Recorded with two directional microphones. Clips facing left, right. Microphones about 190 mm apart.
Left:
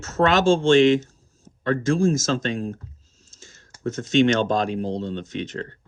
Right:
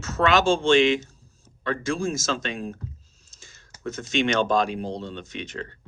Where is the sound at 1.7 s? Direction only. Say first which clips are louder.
Left 7 dB; 10° right (ahead or behind).